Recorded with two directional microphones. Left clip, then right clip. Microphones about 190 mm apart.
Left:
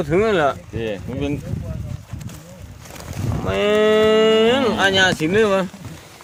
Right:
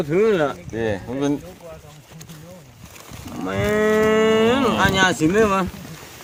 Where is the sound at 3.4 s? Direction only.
30° left (ahead or behind).